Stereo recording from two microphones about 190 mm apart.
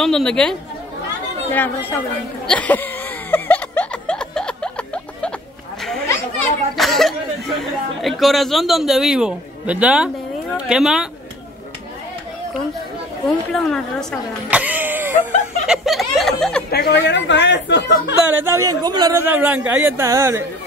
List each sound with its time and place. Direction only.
0.0 s a man's voice: 5° left (ahead or behind)
2.4 s a sound: 5° left (ahead or behind)
6.8 s a sound: centre (ahead or behind)
8.0 s a man's voice: centre (ahead or behind)
13.5 s a man's voice: 5° left (ahead or behind)
14.5 s a sound: 10° right (ahead or behind)
15.6 s snicker: centre (ahead or behind)
16.7 s speech: 65° left (ahead or behind)
18.3 s speech: 15° right (ahead or behind)